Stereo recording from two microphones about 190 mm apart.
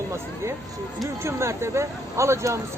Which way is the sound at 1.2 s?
15° right (ahead or behind).